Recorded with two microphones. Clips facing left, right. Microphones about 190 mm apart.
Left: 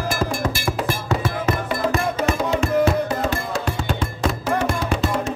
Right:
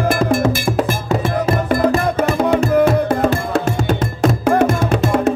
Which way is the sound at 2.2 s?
55° right (ahead or behind).